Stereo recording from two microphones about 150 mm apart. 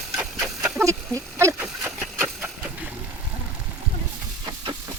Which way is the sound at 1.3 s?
15° right (ahead or behind).